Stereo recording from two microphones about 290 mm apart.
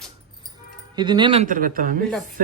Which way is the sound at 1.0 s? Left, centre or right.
Centre.